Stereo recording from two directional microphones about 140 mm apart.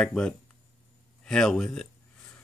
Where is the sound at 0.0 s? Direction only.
5° left (ahead or behind).